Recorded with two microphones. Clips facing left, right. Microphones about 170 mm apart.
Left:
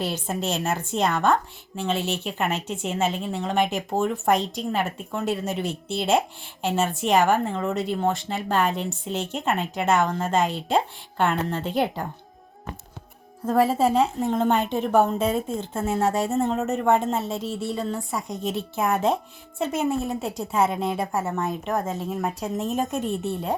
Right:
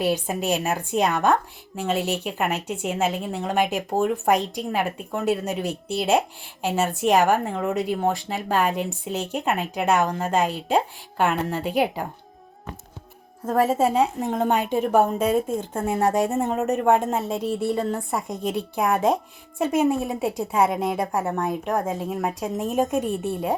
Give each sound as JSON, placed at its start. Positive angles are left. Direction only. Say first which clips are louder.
{"t": 0.0, "sound": "a woman's voice", "louder": "right 4 dB", "side_deg": -10}
{"t": 13.4, "sound": "a woman's voice", "louder": "even", "side_deg": -10}
{"t": 17.3, "sound": "a woman's voice", "louder": "right 4 dB", "side_deg": -60}
{"t": 19.5, "sound": "a woman's voice", "louder": "right 4 dB", "side_deg": -10}
{"t": 21.0, "sound": "speech", "louder": "right 1 dB", "side_deg": 5}
{"t": 21.2, "sound": "a woman's voice", "louder": "right 2 dB", "side_deg": -10}